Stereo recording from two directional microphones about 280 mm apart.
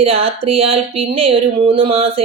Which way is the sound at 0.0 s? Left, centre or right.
Right.